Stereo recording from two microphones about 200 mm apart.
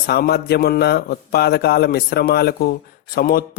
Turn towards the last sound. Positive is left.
turn(degrees=50)  # may be behind; listen again after turning